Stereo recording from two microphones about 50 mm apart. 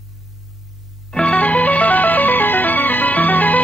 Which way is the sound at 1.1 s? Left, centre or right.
Left.